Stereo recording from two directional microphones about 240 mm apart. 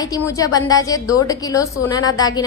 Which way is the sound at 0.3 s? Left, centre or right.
Centre.